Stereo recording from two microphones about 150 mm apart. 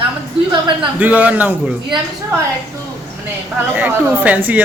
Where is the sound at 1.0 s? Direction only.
10° right (ahead or behind).